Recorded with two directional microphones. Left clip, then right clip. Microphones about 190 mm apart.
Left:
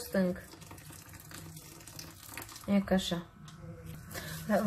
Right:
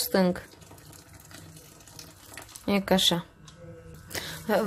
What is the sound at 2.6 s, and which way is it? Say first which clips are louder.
Speech: right 9 dB; 60° right (ahead or behind).